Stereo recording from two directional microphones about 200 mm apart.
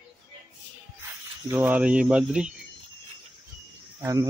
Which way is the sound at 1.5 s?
10° right (ahead or behind).